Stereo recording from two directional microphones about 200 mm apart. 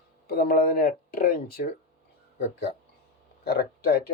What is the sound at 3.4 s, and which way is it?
Speech, 50° left (ahead or behind).